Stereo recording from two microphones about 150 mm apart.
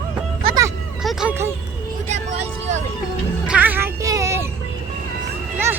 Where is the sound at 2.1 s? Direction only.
50° right (ahead or behind).